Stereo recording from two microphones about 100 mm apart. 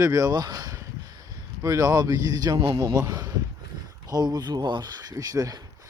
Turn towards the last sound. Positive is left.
turn(degrees=-40)  # may be behind; listen again after turning